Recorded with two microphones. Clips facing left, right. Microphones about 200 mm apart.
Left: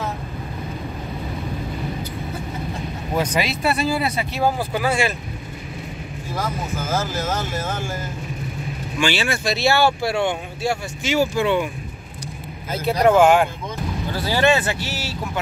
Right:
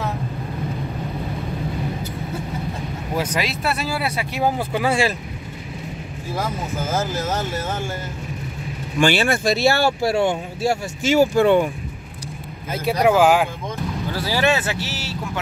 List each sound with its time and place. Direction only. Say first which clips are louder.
3.2 s speech: left 2 dB; centre (ahead or behind)
4.7 s speech: right 1 dB; 30° right (ahead or behind)
6.9 s speech: even; 15° right (ahead or behind)
9.0 s speech: right 4 dB; 50° right (ahead or behind)
12.7 s speech: left 1 dB; 10° right (ahead or behind)